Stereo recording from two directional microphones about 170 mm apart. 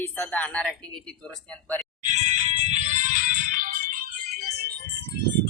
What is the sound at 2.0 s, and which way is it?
Music, 45° right (ahead or behind).